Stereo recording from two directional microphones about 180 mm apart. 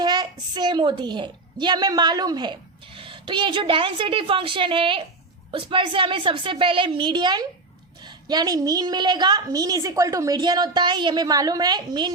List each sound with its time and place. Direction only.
0.0 s a woman's voice: 25° right (ahead or behind)